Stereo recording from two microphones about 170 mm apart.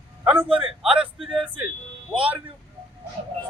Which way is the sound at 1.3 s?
30° right (ahead or behind).